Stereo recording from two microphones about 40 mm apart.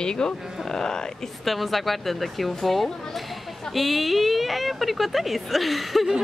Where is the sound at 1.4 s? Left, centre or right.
Centre.